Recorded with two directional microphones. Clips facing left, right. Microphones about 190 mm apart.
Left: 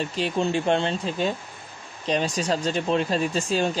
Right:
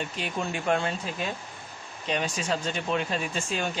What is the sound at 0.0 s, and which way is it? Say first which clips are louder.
Speech: left 7 dB; 30° left (ahead or behind).